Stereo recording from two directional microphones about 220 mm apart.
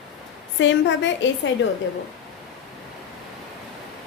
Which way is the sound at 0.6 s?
55° left (ahead or behind).